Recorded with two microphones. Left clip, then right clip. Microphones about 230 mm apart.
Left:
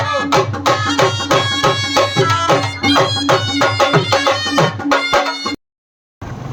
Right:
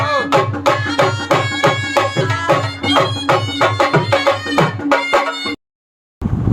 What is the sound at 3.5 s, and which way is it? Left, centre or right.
Music, left.